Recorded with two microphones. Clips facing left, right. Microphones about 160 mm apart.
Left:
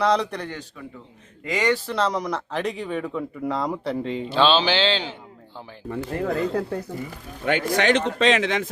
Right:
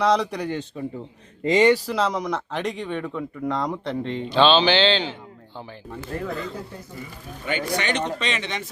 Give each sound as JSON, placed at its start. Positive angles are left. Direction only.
{"t": 0.0, "sound": "speech", "side_deg": 0}
{"t": 0.8, "sound": "a man's voice", "side_deg": -30}
{"t": 1.7, "sound": "speech", "side_deg": -5}
{"t": 6.2, "sound": "speech", "side_deg": 70}
{"t": 7.4, "sound": "speech", "side_deg": 90}